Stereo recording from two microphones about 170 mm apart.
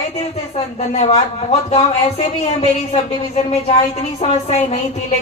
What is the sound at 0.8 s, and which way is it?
A woman's voice, 40° left (ahead or behind).